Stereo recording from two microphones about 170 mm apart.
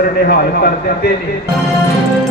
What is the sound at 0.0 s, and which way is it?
Speech, 65° left (ahead or behind).